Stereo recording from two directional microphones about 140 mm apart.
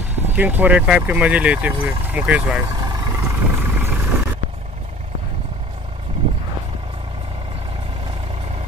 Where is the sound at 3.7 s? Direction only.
15° right (ahead or behind).